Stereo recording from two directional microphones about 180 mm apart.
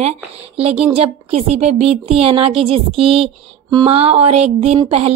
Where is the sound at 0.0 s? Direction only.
35° right (ahead or behind).